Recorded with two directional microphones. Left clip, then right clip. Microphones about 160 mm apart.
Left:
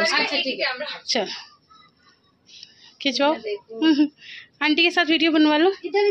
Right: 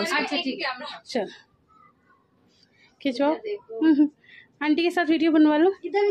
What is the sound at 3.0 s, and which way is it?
A woman's voice, 15° right (ahead or behind).